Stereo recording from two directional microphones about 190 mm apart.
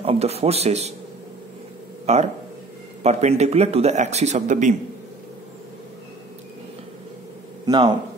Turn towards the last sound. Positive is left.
turn(degrees=-25)  # may be behind; listen again after turning